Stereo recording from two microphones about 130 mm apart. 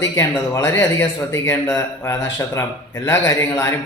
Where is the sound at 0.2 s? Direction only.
20° left (ahead or behind).